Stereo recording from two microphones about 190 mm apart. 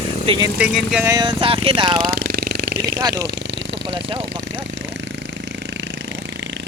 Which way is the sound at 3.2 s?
70° right (ahead or behind).